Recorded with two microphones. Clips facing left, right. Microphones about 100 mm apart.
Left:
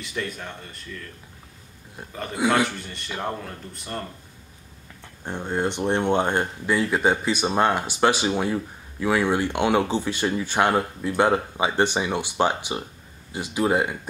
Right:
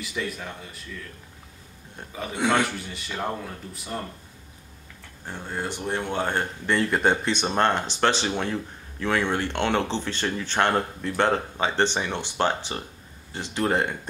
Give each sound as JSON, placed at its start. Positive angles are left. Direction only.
{"t": 0.0, "sound": "a man's voice", "side_deg": 0}
{"t": 2.0, "sound": "a man's voice", "side_deg": 0}
{"t": 5.2, "sound": "speech", "side_deg": 20}
{"t": 6.6, "sound": "speech", "side_deg": 5}